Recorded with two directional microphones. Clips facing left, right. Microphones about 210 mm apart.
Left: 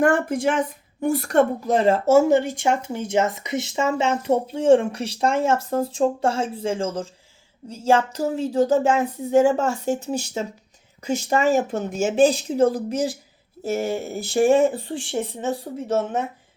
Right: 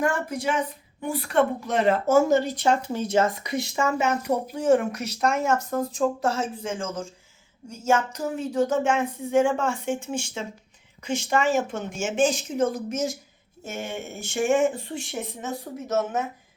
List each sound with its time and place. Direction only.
0.0 s speech: 50° left (ahead or behind); by 2.3 s 30° left (ahead or behind)
2.3 s speech: 10° left (ahead or behind); by 16.2 s 30° left (ahead or behind)